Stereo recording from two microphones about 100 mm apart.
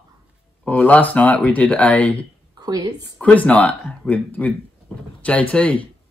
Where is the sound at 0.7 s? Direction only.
15° left (ahead or behind).